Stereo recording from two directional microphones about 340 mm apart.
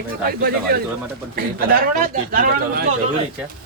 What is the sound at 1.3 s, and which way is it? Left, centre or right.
Speech, right.